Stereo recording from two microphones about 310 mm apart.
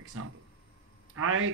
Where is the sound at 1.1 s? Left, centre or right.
Right.